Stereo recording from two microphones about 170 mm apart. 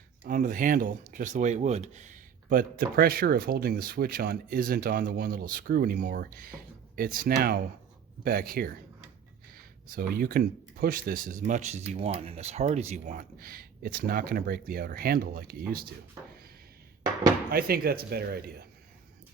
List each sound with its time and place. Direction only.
0.3 s speech: 55° right (ahead or behind)
13.1 s speech: 60° right (ahead or behind)
17.5 s speech: 65° right (ahead or behind)